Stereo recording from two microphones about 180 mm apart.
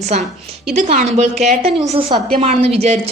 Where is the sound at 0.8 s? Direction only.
40° right (ahead or behind).